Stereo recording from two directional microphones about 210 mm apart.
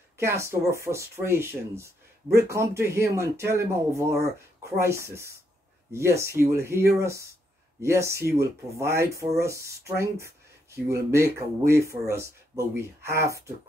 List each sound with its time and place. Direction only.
0.2 s speech: 10° right (ahead or behind)